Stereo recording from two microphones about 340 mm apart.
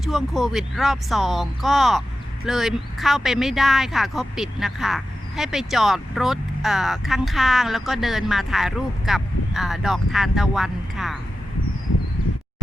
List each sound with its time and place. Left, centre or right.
0.0 s speech: centre